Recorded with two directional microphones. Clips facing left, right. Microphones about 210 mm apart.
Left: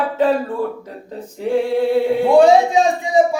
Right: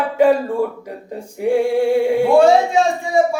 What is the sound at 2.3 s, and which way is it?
Speech, 15° left (ahead or behind).